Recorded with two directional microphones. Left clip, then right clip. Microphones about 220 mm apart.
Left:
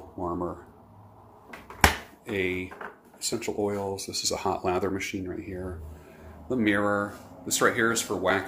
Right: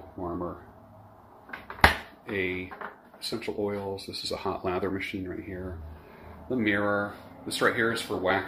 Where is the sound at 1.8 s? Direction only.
15° left (ahead or behind).